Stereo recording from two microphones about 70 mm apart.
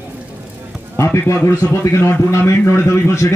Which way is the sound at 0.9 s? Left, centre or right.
Left.